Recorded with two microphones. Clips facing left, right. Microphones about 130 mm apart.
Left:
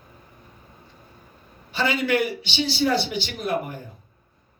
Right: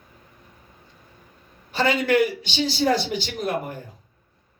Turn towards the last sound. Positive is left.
turn(degrees=-45)  # may be behind; listen again after turning